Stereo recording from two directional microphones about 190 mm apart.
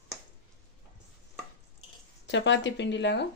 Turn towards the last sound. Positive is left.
turn(degrees=65)  # may be behind; listen again after turning